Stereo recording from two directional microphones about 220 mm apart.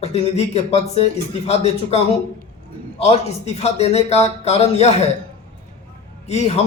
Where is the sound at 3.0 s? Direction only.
30° left (ahead or behind).